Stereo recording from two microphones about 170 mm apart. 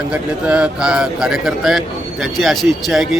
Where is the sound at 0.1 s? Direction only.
5° right (ahead or behind).